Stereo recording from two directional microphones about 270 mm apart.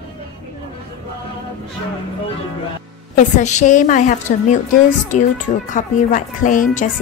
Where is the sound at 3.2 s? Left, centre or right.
Left.